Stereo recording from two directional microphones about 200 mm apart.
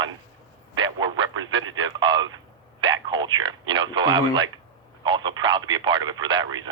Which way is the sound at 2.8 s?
25° right (ahead or behind).